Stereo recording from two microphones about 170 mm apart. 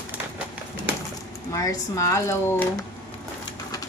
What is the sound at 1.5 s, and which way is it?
Speech, 20° left (ahead or behind).